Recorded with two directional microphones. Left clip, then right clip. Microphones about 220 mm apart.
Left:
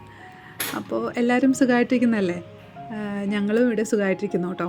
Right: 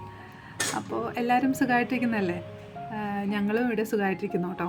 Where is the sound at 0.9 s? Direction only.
15° left (ahead or behind).